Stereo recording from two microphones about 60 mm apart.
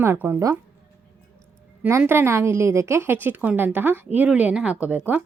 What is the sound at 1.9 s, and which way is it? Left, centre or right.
A woman's voice, right.